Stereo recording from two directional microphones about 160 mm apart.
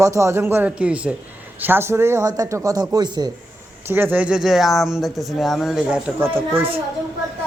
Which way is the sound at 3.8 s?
15° right (ahead or behind).